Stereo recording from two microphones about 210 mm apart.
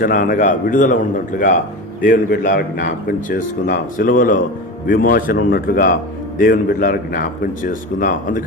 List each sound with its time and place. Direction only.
0.0 s a man's voice: 40° left (ahead or behind)